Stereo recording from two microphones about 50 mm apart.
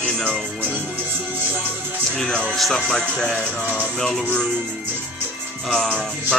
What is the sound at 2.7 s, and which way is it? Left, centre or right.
Speech, centre.